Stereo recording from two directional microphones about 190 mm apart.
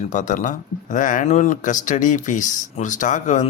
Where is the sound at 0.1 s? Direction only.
40° left (ahead or behind).